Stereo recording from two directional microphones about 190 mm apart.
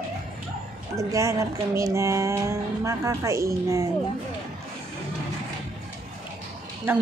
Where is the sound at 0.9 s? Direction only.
15° right (ahead or behind).